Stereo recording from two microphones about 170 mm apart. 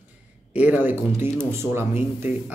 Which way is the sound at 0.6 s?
10° right (ahead or behind).